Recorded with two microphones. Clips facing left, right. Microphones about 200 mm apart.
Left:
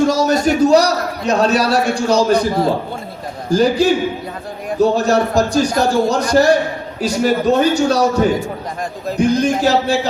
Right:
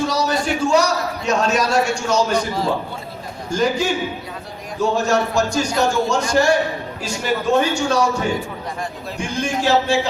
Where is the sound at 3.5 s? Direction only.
35° left (ahead or behind).